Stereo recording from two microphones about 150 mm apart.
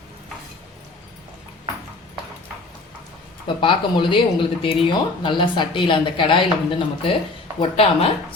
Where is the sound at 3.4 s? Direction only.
35° left (ahead or behind).